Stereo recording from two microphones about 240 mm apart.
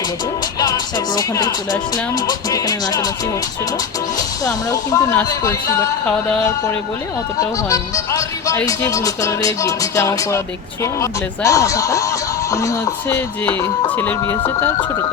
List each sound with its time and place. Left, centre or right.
0.6 s music: centre
2.2 s speech: centre
4.4 s speech: centre
7.3 s speech: centre